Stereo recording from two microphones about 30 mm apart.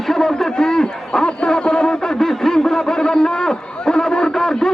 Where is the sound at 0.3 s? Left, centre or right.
Left.